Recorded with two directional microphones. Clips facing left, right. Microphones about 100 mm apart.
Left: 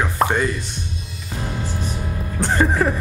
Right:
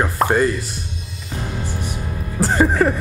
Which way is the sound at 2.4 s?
Centre (ahead or behind).